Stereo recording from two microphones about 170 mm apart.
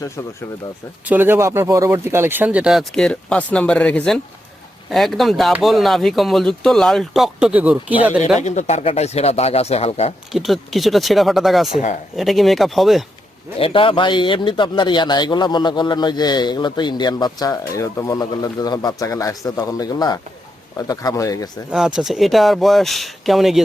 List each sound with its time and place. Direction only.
1.0 s speech: 10° right (ahead or behind)
8.4 s speech: 45° left (ahead or behind)
10.3 s speech: centre (ahead or behind)
13.6 s a man's voice: 30° left (ahead or behind)
21.7 s speech: 5° right (ahead or behind)